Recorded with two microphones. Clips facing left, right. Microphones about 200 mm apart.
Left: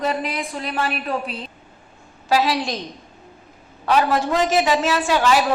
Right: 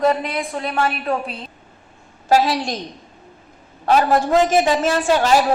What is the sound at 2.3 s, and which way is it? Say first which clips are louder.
Speech: right 3 dB; 45° right (ahead or behind).